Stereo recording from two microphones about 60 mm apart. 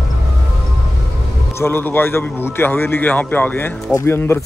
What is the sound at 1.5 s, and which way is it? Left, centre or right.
Speech, left.